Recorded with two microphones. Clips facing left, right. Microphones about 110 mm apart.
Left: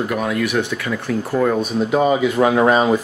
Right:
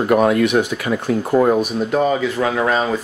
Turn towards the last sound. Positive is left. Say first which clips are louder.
# left 4 dB
turn(degrees=15)  # may be behind; listen again after turning